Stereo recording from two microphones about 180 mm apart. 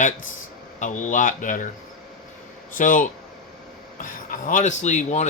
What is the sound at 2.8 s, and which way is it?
Speech, 50° left (ahead or behind).